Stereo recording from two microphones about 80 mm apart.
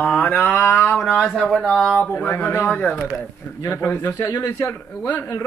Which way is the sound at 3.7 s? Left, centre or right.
Left.